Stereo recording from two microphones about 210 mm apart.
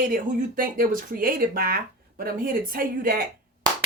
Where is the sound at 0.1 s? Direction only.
40° right (ahead or behind).